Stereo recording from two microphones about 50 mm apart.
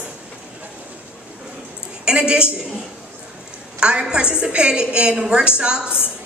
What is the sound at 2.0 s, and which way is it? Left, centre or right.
Speech, centre.